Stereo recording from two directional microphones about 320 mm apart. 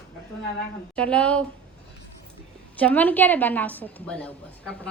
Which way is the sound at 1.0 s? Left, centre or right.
Centre.